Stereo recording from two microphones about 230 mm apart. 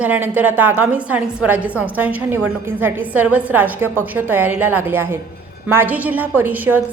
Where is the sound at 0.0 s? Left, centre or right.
Centre.